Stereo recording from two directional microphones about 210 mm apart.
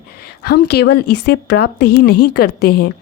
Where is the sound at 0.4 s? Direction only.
50° left (ahead or behind).